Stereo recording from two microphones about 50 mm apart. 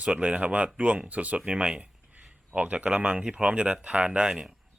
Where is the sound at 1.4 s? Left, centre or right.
Right.